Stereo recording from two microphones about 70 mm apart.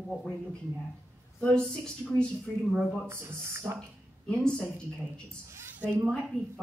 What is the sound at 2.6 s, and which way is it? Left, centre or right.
Speech, centre.